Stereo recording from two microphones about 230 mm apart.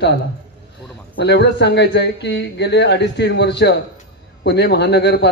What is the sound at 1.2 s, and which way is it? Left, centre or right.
A man's voice, left.